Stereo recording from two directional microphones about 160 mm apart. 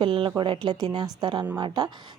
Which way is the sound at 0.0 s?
30° right (ahead or behind).